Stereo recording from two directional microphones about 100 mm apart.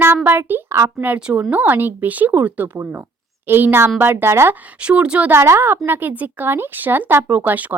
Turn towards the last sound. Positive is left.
turn(degrees=-15)  # may be behind; listen again after turning